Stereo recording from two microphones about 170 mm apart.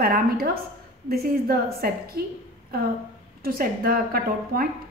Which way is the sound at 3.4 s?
60° right (ahead or behind).